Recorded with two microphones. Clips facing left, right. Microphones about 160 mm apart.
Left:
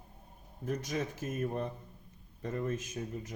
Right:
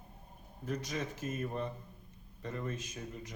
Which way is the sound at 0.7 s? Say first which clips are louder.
Left 2 dB; 55° left (ahead or behind).